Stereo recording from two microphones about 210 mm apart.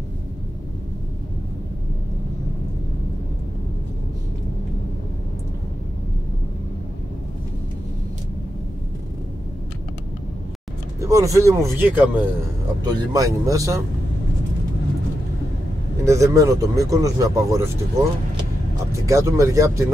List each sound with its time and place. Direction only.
11.0 s speech: 15° right (ahead or behind)
16.1 s speech: 15° right (ahead or behind)
18.9 s speech: 15° right (ahead or behind)